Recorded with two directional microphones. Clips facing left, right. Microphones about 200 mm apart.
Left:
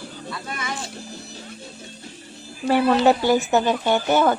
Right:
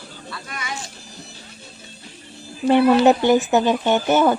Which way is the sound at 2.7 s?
20° right (ahead or behind).